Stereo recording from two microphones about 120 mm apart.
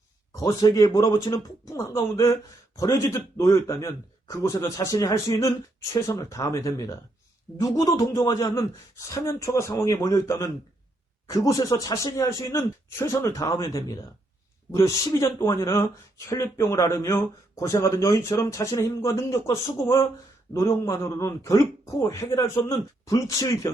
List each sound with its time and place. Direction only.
0.3 s speech: 25° left (ahead or behind)